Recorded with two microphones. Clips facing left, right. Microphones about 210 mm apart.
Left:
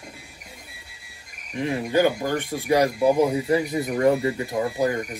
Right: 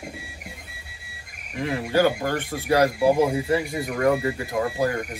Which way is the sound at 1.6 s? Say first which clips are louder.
Even; 15° left (ahead or behind).